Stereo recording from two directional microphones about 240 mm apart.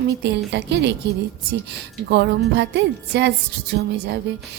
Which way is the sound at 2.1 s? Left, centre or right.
Right.